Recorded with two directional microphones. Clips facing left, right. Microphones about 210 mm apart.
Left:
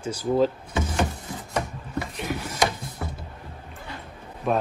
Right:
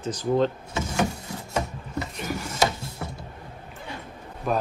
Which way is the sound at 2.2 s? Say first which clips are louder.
Left 1 dB; centre (ahead or behind).